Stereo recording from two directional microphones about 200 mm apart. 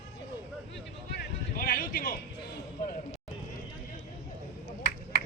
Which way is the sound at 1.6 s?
45° left (ahead or behind).